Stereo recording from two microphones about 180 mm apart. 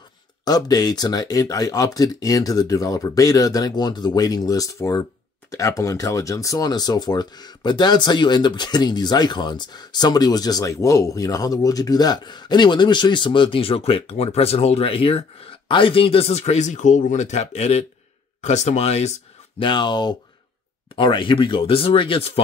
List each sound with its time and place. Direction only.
0.5 s speech: 20° left (ahead or behind)
19.6 s speech: 25° left (ahead or behind)